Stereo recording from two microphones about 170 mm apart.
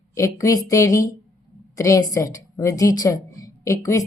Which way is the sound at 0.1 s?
20° left (ahead or behind).